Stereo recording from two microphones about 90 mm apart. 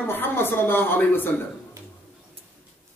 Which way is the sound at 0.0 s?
25° left (ahead or behind).